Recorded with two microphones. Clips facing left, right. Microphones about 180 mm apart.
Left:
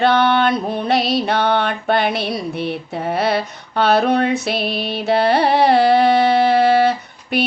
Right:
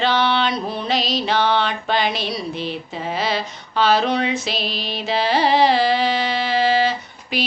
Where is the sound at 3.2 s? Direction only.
60° left (ahead or behind).